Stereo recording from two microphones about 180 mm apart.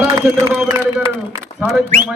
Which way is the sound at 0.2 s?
15° right (ahead or behind).